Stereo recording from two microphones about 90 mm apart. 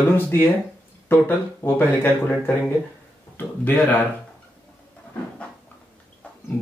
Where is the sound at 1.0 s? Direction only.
20° left (ahead or behind).